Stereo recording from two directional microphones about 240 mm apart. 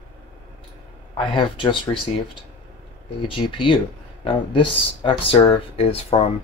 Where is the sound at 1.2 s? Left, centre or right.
Left.